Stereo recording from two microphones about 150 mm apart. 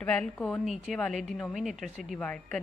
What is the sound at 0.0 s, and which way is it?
A woman's voice, 5° left (ahead or behind).